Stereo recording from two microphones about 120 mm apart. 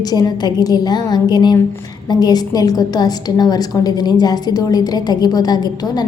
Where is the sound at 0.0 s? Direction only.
35° left (ahead or behind).